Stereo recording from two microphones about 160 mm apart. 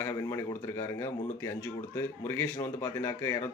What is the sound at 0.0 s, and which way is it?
Speech, 15° left (ahead or behind).